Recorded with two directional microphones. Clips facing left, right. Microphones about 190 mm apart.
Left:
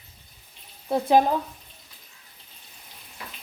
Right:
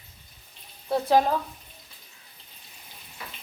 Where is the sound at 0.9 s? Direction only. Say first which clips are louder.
Left 2 dB; 15° left (ahead or behind).